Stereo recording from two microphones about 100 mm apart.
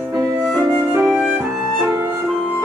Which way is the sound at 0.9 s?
10° right (ahead or behind).